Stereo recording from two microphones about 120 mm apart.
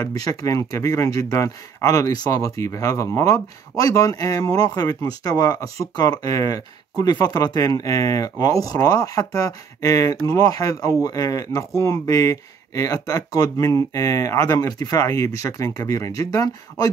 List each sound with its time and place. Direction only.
0.0 s speech: 30° left (ahead or behind)